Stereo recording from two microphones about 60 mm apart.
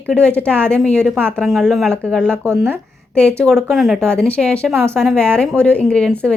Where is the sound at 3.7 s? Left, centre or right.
Centre.